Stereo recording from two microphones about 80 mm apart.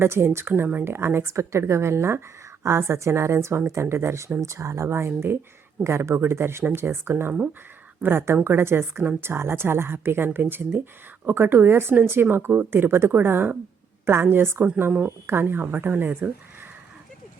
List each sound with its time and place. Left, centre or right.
0.0 s a woman's voice: right